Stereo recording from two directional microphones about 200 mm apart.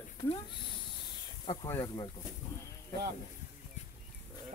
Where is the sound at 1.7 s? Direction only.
15° left (ahead or behind).